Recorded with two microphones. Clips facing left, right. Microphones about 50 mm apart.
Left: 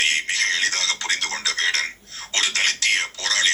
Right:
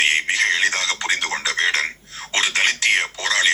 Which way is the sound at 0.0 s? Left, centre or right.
Right.